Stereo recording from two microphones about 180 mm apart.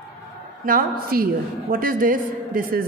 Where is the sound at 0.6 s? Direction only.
50° right (ahead or behind).